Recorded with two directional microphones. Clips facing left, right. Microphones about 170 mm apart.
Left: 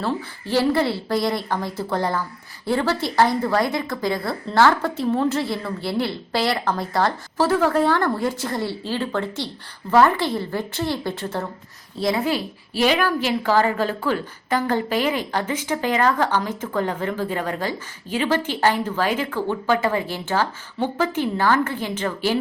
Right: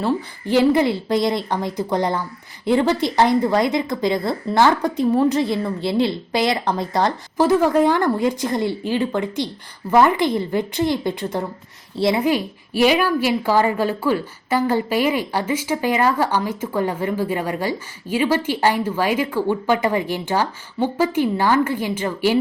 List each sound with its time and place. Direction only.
0.0 s a woman's voice: 15° right (ahead or behind)
11.9 s a woman's voice: 25° right (ahead or behind)
12.2 s a woman's voice: 15° right (ahead or behind)